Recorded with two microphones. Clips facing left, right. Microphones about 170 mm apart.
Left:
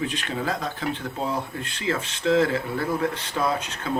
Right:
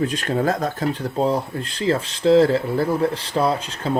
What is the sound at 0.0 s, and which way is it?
Speech, 40° right (ahead or behind).